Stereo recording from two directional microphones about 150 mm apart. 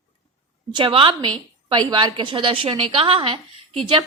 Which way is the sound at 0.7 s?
35° right (ahead or behind).